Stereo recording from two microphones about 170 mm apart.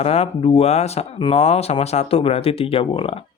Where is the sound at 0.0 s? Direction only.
35° left (ahead or behind).